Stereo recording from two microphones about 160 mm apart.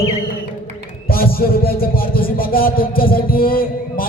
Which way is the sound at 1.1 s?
70° left (ahead or behind).